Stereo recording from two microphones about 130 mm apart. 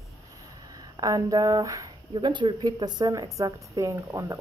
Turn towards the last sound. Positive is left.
turn(degrees=-25)  # may be behind; listen again after turning